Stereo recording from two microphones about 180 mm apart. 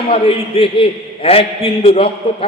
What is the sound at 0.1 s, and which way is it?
A man's voice, 30° left (ahead or behind).